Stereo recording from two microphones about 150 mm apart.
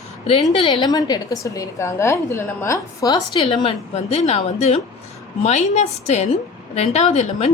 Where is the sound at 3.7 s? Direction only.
45° left (ahead or behind).